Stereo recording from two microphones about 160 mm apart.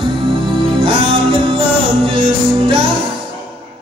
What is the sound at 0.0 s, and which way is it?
Music, 30° right (ahead or behind).